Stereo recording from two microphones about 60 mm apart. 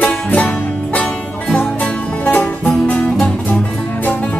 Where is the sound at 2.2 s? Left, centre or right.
Left.